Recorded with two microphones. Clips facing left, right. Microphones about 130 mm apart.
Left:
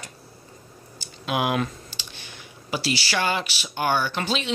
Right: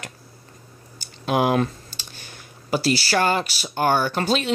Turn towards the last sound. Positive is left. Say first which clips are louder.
# right 5 dB
turn(degrees=-45)  # may be behind; listen again after turning